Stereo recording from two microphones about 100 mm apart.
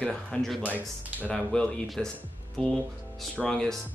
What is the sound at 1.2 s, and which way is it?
Speech, 5° left (ahead or behind).